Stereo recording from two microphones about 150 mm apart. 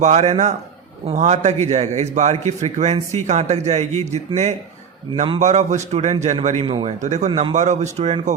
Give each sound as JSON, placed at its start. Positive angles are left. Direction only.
{"t": 0.0, "sound": "a man's voice", "side_deg": -50}